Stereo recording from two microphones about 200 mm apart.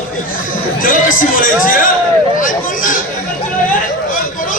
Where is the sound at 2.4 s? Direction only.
45° left (ahead or behind).